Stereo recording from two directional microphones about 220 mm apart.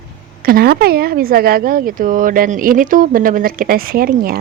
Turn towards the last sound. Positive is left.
turn(degrees=-40)  # may be behind; listen again after turning